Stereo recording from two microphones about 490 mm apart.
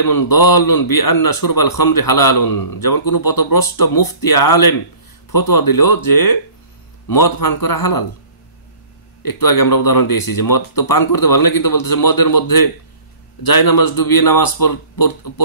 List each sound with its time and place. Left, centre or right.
0.0 s a man's voice: left
9.2 s a man's voice: left